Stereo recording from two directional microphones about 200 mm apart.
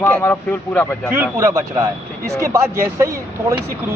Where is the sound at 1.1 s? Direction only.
10° right (ahead or behind).